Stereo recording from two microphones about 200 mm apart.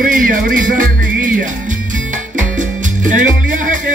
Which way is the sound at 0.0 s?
45° right (ahead or behind).